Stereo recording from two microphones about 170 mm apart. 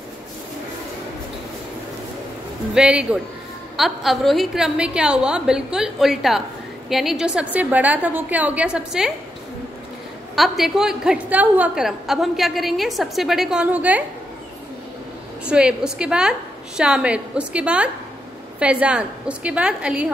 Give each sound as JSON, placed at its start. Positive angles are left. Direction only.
{"t": 2.7, "sound": "a woman's voice", "side_deg": -5}
{"t": 10.3, "sound": "a woman's voice", "side_deg": 0}
{"t": 15.4, "sound": "a woman's voice", "side_deg": -5}